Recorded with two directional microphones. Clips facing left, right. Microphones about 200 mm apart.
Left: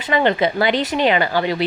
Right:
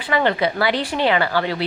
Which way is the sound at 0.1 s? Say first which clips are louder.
Left 2 dB; 20° left (ahead or behind).